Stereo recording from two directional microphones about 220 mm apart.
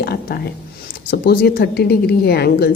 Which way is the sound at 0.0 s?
45° left (ahead or behind).